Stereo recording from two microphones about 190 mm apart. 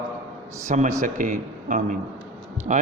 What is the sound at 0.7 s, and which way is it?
A man's voice, 40° right (ahead or behind).